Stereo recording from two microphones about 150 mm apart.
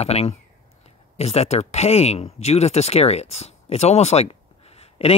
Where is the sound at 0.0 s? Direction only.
45° left (ahead or behind).